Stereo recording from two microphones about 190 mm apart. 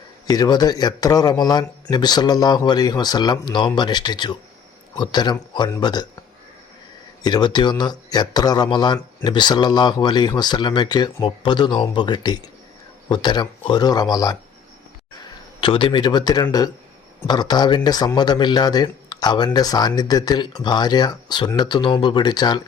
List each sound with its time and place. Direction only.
0.3 s speech: 20° left (ahead or behind)
7.2 s speech: 20° left (ahead or behind)
15.6 s speech: 25° left (ahead or behind)